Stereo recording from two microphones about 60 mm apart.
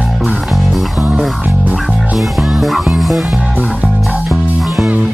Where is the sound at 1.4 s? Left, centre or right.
Right.